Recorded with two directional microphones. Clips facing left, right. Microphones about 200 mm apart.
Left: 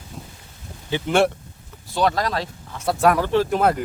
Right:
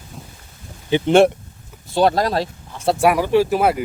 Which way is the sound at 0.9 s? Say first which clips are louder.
Right 6 dB; 20° right (ahead or behind).